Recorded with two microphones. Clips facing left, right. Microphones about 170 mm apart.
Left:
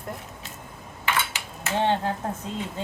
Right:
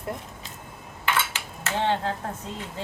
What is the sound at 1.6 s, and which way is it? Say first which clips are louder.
Speech: left 2 dB; 15° left (ahead or behind).